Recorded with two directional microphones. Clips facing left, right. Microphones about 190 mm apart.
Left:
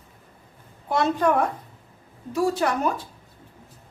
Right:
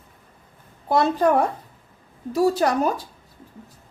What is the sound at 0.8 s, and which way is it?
A woman's voice, 35° right (ahead or behind).